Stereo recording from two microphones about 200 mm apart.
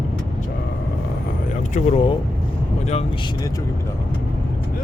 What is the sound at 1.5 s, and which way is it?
Speech, 35° left (ahead or behind).